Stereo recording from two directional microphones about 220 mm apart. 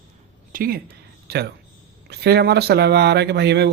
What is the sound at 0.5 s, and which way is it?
Speech, 40° right (ahead or behind).